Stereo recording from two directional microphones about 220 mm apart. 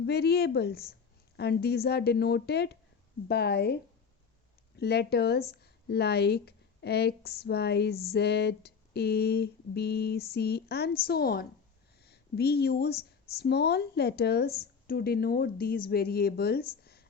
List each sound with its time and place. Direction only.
0.0 s speech: 45° left (ahead or behind)
4.8 s speech: 45° left (ahead or behind)